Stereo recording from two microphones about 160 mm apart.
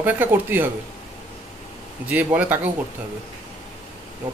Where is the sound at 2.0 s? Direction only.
10° right (ahead or behind).